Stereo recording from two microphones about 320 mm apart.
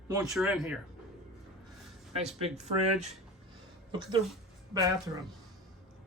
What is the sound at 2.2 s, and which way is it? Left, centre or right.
Speech, centre.